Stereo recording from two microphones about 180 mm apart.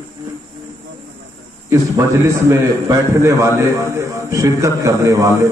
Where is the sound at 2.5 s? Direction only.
15° right (ahead or behind).